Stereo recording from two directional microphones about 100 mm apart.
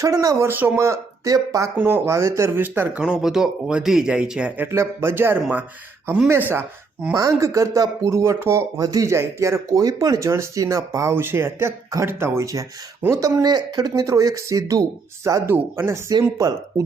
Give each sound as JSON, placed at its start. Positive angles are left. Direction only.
{"t": 0.0, "sound": "speech", "side_deg": -35}
{"t": 0.4, "sound": "speech", "side_deg": -20}
{"t": 0.9, "sound": "speech", "side_deg": -35}
{"t": 3.1, "sound": "speech", "side_deg": -5}
{"t": 4.7, "sound": "speech", "side_deg": -25}
{"t": 7.1, "sound": "speech", "side_deg": -35}
{"t": 16.4, "sound": "speech", "side_deg": -40}